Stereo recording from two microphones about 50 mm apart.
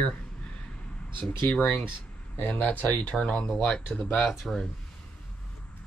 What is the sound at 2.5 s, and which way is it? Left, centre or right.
Speech, left.